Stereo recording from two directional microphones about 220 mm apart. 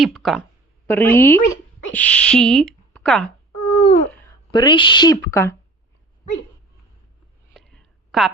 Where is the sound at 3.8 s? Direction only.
25° left (ahead or behind).